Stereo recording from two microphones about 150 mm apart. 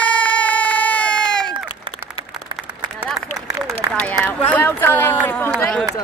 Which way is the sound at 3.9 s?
10° left (ahead or behind).